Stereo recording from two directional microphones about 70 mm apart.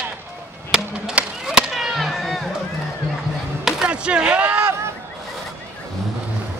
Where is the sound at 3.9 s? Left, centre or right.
Centre.